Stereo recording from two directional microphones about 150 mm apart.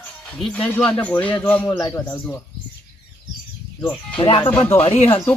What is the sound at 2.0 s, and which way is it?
Speech, 15° left (ahead or behind).